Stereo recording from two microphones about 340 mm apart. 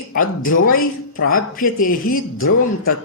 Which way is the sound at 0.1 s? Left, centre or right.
Left.